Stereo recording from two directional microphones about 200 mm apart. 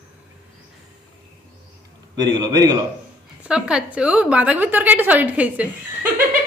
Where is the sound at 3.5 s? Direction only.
5° right (ahead or behind).